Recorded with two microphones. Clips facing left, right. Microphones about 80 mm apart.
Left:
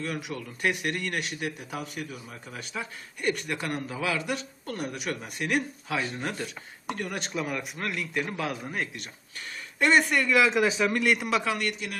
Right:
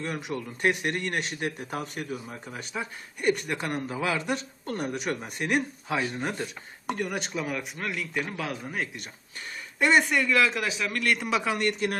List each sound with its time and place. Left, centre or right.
0.0 s speech: right
7.2 s a man's voice: centre
10.7 s a man's voice: left; by 11.3 s centre